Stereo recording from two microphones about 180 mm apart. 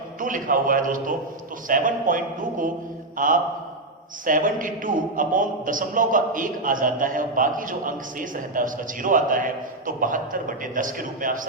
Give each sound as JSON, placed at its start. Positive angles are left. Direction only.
{"t": 0.2, "sound": "a man's voice", "side_deg": -50}